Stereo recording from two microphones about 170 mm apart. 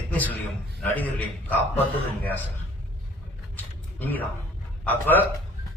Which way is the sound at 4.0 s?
10° left (ahead or behind).